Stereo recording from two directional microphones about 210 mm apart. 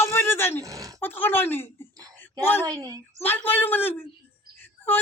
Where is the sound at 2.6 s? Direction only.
15° right (ahead or behind).